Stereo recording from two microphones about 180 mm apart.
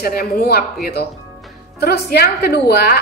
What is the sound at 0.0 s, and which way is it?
Speech, 55° left (ahead or behind).